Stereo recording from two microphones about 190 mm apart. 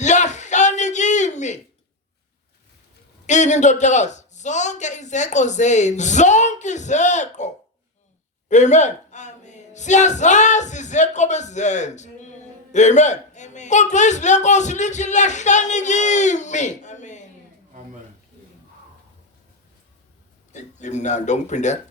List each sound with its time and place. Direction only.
0.0 s a sound: 40° left (ahead or behind)
3.2 s a man's voice: 40° left (ahead or behind)
20.5 s speech: 40° left (ahead or behind)